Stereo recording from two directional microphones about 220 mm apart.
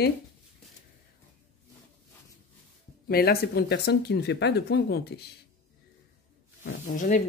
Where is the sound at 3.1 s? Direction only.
45° left (ahead or behind).